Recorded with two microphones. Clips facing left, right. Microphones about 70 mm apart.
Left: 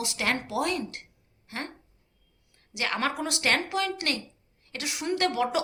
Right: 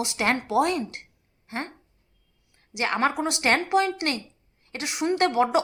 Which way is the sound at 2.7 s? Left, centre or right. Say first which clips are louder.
Right 5 dB; right.